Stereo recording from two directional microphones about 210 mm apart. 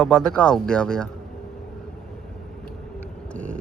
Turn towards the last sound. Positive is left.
turn(degrees=5)  # may be behind; listen again after turning